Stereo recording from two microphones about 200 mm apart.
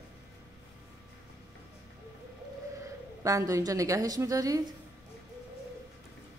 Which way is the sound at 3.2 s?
15° right (ahead or behind).